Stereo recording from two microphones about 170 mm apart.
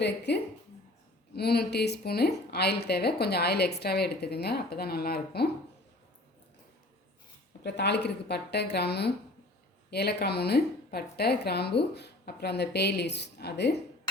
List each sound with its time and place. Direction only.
0.3 s a woman's voice: 80° left
7.6 s a woman's voice: 80° left